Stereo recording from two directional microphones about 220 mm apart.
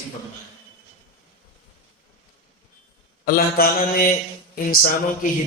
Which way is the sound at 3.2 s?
40° left (ahead or behind).